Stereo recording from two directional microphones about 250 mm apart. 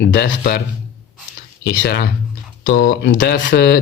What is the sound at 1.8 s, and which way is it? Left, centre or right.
A man's voice, left.